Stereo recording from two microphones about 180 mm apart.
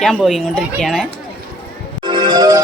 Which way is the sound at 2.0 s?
25° right (ahead or behind).